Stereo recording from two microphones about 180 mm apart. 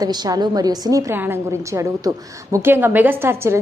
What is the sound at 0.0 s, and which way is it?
A woman's voice, 20° right (ahead or behind).